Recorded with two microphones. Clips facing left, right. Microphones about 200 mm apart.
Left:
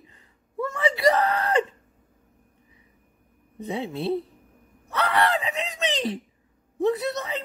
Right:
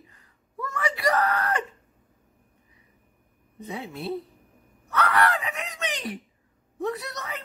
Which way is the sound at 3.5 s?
25° left (ahead or behind).